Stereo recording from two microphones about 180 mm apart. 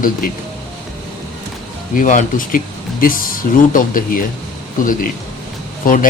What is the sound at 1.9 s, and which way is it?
Speech, 45° left (ahead or behind).